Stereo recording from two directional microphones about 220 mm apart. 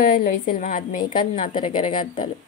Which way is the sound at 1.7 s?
20° left (ahead or behind).